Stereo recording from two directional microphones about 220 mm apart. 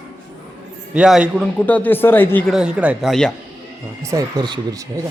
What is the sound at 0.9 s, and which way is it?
A man's voice, 5° right (ahead or behind).